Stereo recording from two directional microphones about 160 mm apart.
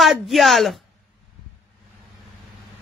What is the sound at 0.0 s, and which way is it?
Speech, centre (ahead or behind).